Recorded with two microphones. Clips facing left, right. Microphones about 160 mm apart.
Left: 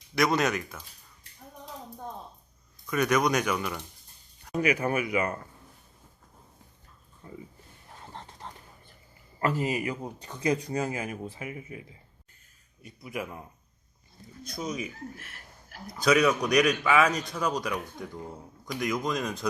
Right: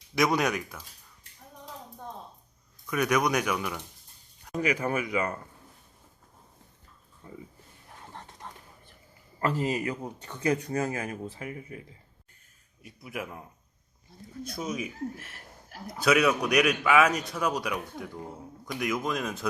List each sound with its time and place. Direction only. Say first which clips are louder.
0.2 s a man's voice: even; 10° right (ahead or behind)
2.9 s a man's voice: left 1 dB; 10° right (ahead or behind)
4.5 s speech: left 2 dB; 10° left (ahead or behind)
8.1 s dog: left 1 dB; 20° left (ahead or behind)
9.4 s speech: even; 10° left (ahead or behind)
10.9 s speech: even; 25° left (ahead or behind)
12.8 s a man's voice: left 1 dB; centre (ahead or behind)
16.0 s a man's voice: left 1 dB; 5° right (ahead or behind)